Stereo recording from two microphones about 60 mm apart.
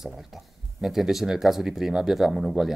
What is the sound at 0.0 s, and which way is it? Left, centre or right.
Speech, centre.